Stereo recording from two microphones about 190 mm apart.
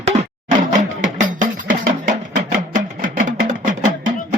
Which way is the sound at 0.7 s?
40° right (ahead or behind).